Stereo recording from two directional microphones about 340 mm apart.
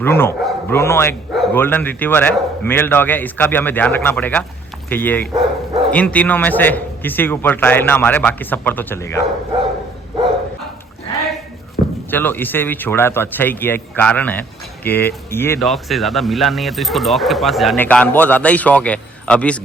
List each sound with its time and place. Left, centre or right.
0.0 s speech: centre
11.8 s a sound: left
12.1 s speech: centre